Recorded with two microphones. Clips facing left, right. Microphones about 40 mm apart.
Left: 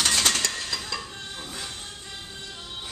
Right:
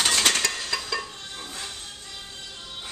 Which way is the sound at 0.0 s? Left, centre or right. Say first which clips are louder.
Right 1 dB; centre.